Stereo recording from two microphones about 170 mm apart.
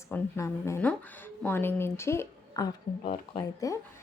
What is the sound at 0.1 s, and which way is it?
A woman's voice, 15° left (ahead or behind).